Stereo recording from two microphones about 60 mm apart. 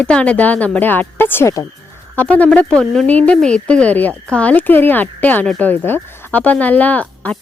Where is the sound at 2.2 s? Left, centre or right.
Left.